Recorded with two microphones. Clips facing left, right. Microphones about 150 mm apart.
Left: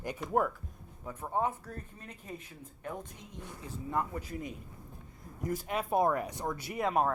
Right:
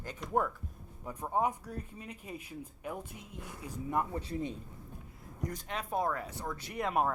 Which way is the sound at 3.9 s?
30° right (ahead or behind).